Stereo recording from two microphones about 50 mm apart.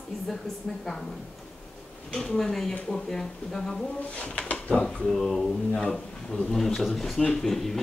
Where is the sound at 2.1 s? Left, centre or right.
Centre.